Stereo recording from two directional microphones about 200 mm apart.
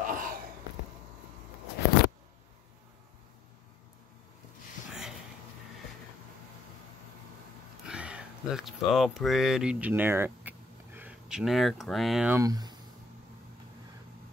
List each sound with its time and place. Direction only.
0.0 s a sound: 45° right (ahead or behind)
7.8 s speech: 5° right (ahead or behind)
12.4 s speech: 20° right (ahead or behind)